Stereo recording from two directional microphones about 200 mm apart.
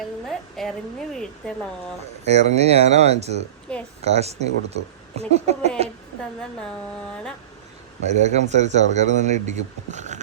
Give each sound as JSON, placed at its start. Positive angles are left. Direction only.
{"t": 0.0, "sound": "speech", "side_deg": 0}
{"t": 2.2, "sound": "a man's voice", "side_deg": -35}
{"t": 3.7, "sound": "speech", "side_deg": 5}
{"t": 4.0, "sound": "a man's voice", "side_deg": -30}
{"t": 6.6, "sound": "speech", "side_deg": 5}
{"t": 8.0, "sound": "a man's voice", "side_deg": -35}